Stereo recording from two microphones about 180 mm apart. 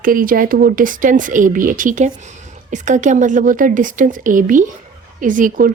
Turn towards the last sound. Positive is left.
turn(degrees=-50)  # may be behind; listen again after turning